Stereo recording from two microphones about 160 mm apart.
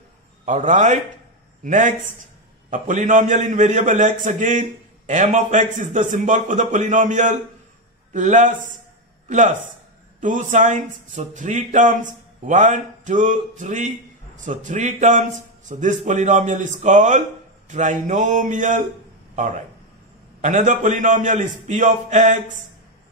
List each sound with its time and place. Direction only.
0.5 s speech: 50° right (ahead or behind)
20.4 s speech: 50° right (ahead or behind)